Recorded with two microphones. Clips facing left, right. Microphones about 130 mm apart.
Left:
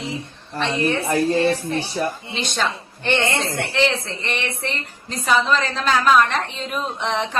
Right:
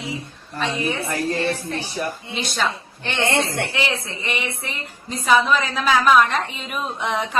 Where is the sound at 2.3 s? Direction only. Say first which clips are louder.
Right 2 dB; 5° right (ahead or behind).